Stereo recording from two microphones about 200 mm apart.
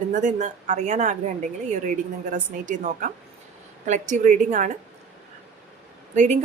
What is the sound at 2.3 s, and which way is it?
A woman's voice, 40° right (ahead or behind).